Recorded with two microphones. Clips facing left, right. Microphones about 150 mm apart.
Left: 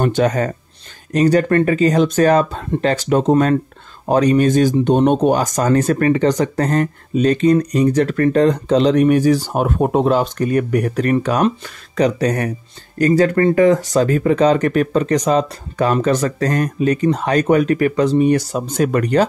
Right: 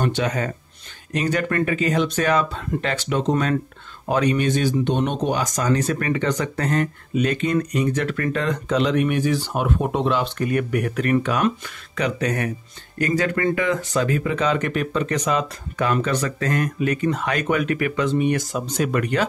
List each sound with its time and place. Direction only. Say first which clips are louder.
0.0 s speech: left 7 dB; 45° left (ahead or behind)
6.0 s speech: left 8 dB; 35° left (ahead or behind)